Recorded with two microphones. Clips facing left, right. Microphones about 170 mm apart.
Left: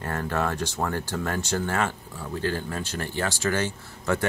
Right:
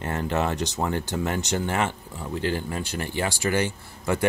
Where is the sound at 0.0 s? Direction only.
20° right (ahead or behind).